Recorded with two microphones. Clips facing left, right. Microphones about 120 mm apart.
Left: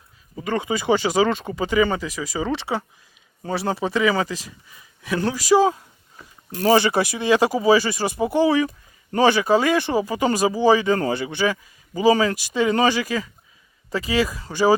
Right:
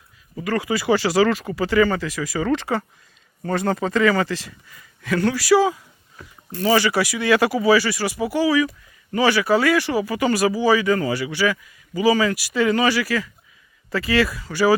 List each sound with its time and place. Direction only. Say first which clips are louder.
0.3 s speech: right 1 dB; 20° left (ahead or behind)
6.7 s speech: left 1 dB; 20° left (ahead or behind)